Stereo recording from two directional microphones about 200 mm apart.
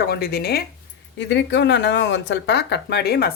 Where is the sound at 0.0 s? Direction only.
50° left (ahead or behind).